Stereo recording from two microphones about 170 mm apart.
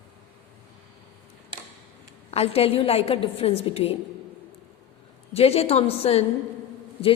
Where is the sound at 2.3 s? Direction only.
35° left (ahead or behind).